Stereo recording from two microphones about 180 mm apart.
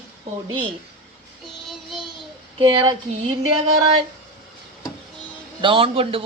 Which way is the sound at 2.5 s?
25° right (ahead or behind).